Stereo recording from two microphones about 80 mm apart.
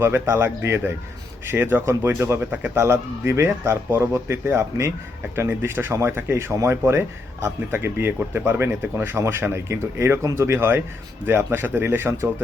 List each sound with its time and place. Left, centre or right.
0.0 s speech: right
2.5 s speech: centre
2.7 s speech: right